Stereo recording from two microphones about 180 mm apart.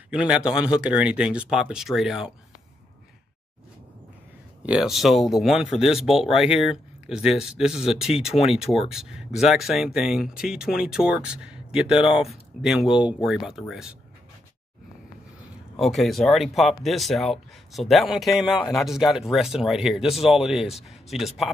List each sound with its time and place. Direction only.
0.1 s speech: 5° right (ahead or behind)
4.6 s speech: 5° right (ahead or behind)
15.8 s speech: centre (ahead or behind)